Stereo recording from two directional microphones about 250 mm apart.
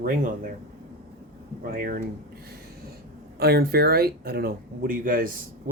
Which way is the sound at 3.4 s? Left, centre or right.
Right.